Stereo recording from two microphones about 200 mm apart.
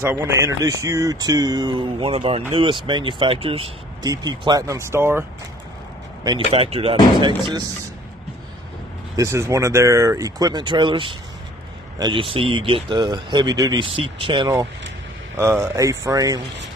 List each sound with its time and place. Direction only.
0.0 s speech: 10° right (ahead or behind)
6.5 s speech: 30° right (ahead or behind)
9.1 s speech: 15° right (ahead or behind)
15.3 s speech: 10° right (ahead or behind)